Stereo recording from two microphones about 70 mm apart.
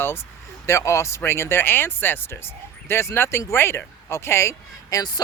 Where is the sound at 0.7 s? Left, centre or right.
Left.